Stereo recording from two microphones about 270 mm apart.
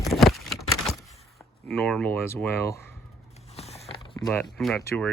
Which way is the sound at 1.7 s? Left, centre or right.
Centre.